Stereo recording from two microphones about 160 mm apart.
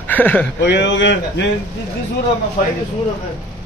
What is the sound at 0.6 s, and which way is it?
Speech, 90° left.